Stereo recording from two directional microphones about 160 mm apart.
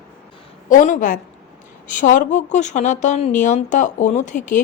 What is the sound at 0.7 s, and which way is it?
A woman's voice, 55° left (ahead or behind).